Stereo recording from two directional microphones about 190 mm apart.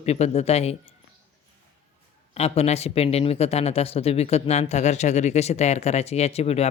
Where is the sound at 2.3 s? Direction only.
35° left (ahead or behind).